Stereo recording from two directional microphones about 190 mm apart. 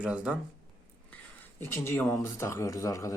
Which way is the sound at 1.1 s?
10° left (ahead or behind).